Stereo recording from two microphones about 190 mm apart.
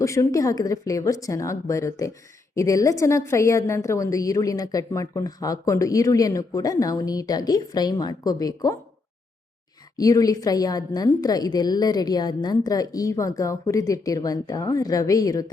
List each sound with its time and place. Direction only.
0.0 s a woman's voice: 15° left (ahead or behind)
10.0 s a woman's voice: 20° left (ahead or behind)